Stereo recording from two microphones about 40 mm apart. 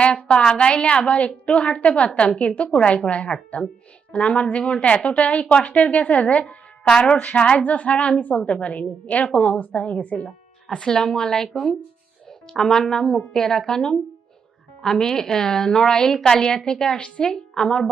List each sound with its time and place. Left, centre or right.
0.0 s a woman's voice: left
10.7 s a woman's voice: centre
12.5 s a woman's voice: centre
17.0 s a woman's voice: left
17.3 s a woman's voice: centre